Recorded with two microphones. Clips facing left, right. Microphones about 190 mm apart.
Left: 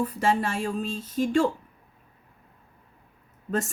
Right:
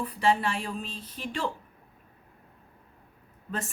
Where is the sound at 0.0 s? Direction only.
45° left (ahead or behind).